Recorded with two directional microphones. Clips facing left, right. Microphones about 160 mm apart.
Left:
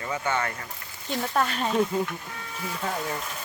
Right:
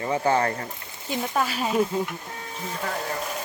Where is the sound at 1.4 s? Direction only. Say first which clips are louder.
Right 2 dB; 5° right (ahead or behind).